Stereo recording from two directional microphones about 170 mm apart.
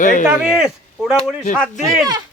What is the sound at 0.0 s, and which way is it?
Speech, 50° left (ahead or behind).